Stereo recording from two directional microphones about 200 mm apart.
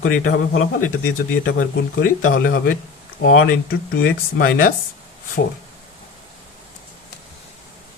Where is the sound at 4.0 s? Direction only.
50° left (ahead or behind).